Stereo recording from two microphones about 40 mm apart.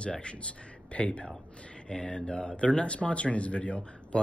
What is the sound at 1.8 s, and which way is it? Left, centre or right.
Speech, left.